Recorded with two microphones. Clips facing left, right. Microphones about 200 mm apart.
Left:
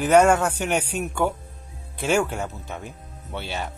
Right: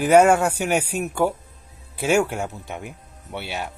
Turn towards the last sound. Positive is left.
turn(degrees=-10)  # may be behind; listen again after turning